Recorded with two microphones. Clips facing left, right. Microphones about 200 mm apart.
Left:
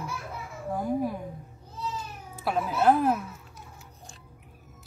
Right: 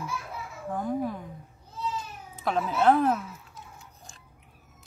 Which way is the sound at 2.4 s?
5° left (ahead or behind).